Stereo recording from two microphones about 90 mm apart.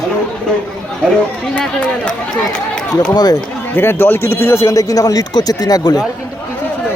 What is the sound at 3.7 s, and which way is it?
Speech, 25° left (ahead or behind).